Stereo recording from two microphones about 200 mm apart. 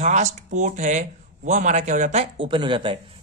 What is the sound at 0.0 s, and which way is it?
Speech, 35° right (ahead or behind).